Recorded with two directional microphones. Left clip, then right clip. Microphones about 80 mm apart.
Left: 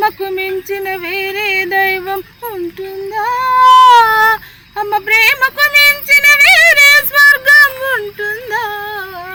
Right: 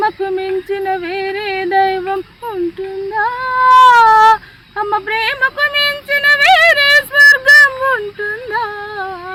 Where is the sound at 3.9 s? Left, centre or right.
Right.